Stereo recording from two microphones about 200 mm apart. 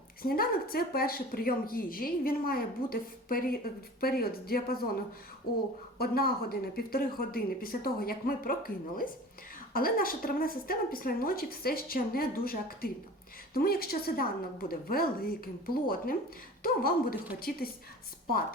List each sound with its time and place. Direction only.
0.2 s speech: 50° left (ahead or behind)
6.0 s speech: 50° left (ahead or behind)